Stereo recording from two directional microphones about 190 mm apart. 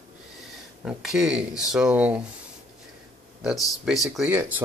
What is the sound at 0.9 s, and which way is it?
Speech, 5° right (ahead or behind).